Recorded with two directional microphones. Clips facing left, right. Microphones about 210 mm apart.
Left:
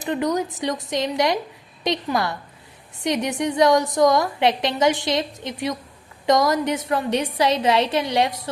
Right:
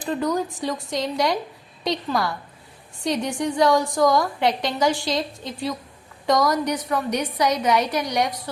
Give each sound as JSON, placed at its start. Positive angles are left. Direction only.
{"t": 0.0, "sound": "a woman's voice", "side_deg": 20}